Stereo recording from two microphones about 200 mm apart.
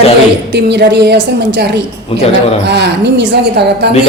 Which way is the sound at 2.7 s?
60° right (ahead or behind).